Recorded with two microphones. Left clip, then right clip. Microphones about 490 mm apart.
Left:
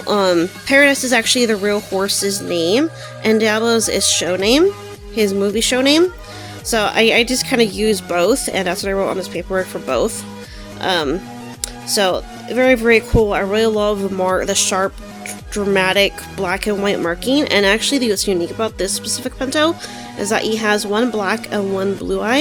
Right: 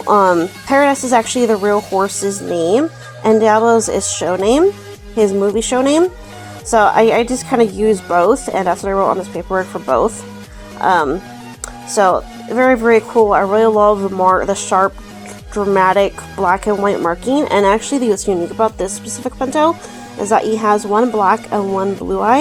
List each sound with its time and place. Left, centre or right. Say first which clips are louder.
0.1 s speech: right 4 dB; left